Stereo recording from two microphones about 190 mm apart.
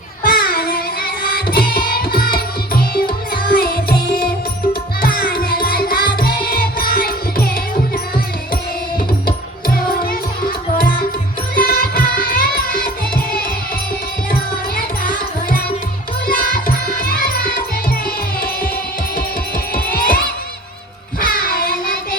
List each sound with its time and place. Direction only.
0.2 s music: 50° left (ahead or behind)
3.5 s carnatic music: 50° left (ahead or behind)
4.9 s music: 50° left (ahead or behind)
9.2 s music: 50° left (ahead or behind)
11.5 s music: 50° left (ahead or behind)
14.8 s music: 50° left (ahead or behind)
19.7 s music: 50° left (ahead or behind)
21.2 s child singing: 50° left (ahead or behind)